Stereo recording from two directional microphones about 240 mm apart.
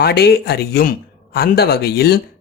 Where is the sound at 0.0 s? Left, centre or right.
Left.